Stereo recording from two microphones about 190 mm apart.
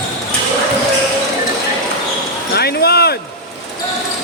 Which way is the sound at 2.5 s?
55° left (ahead or behind).